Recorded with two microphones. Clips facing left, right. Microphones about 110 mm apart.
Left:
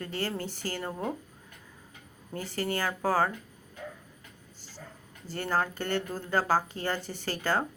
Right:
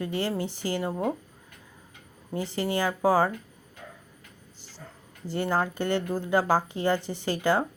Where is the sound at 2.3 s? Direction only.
15° right (ahead or behind).